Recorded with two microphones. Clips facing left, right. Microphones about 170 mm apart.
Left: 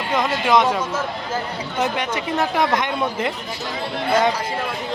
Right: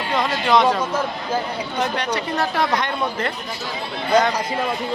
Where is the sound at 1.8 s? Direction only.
15° left (ahead or behind).